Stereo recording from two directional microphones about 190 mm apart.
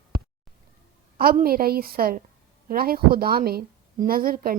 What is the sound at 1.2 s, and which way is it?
Speech, 50° right (ahead or behind).